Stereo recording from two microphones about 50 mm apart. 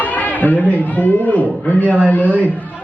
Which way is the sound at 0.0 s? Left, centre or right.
Left.